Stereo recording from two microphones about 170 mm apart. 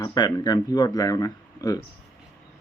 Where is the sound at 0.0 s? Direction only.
25° left (ahead or behind).